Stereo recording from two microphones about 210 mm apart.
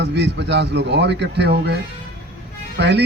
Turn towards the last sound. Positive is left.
turn(degrees=-50)  # may be behind; listen again after turning